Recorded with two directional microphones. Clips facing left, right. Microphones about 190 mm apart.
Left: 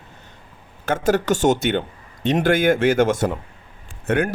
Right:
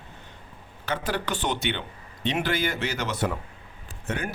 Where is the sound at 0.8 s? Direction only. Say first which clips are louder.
Left 10 dB; 45° left (ahead or behind).